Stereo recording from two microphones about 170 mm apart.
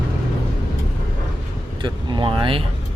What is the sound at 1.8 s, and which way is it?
Speech, 30° right (ahead or behind).